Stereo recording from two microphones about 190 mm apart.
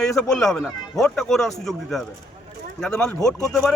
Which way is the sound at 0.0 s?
5° left (ahead or behind).